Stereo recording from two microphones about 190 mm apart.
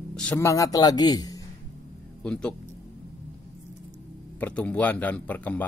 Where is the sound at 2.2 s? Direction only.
5° left (ahead or behind).